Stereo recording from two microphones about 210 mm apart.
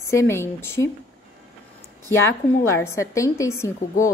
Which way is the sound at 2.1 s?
70° left (ahead or behind).